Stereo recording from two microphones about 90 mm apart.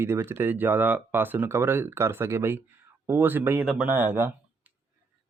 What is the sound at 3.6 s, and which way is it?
Speech, 10° right (ahead or behind).